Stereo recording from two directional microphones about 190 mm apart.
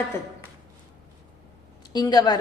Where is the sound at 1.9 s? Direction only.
20° left (ahead or behind).